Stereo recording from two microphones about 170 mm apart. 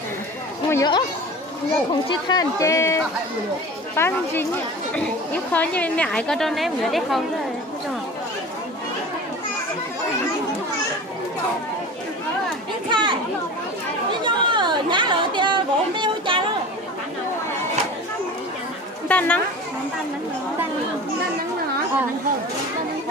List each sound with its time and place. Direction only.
0.7 s speech: 20° left (ahead or behind)
2.0 s a woman's voice: 25° left (ahead or behind); by 7.2 s centre (ahead or behind)
12.9 s chatter: 30° right (ahead or behind)
14.2 s chatter: 25° right (ahead or behind)
19.0 s chatter: 10° left (ahead or behind)